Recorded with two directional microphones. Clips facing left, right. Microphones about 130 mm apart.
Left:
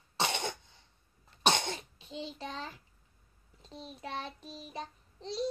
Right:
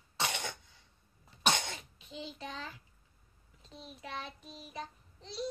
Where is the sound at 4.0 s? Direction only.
35° left (ahead or behind).